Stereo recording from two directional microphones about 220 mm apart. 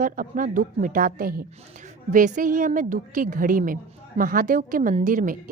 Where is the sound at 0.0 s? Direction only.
40° right (ahead or behind).